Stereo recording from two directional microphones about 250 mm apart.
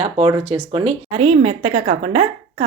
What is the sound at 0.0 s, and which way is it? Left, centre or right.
Speech, right.